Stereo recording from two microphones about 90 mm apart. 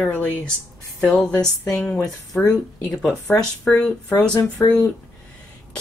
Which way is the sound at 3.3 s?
15° left (ahead or behind).